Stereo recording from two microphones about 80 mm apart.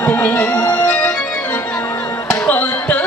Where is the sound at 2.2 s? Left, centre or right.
Centre.